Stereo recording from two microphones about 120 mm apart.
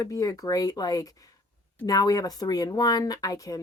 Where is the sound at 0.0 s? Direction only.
30° left (ahead or behind).